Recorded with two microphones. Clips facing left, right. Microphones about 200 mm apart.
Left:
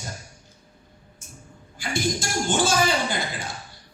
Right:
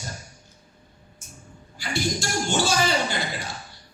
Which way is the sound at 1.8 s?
50° left (ahead or behind).